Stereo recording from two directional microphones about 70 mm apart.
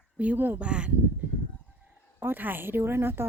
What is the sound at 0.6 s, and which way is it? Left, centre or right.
Speech, centre.